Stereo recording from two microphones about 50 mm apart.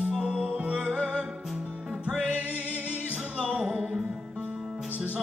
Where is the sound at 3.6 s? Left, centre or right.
Centre.